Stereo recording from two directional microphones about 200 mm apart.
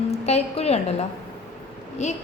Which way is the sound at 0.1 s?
30° left (ahead or behind).